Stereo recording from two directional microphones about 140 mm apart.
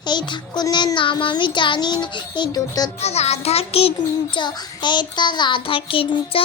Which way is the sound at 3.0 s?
50° left (ahead or behind).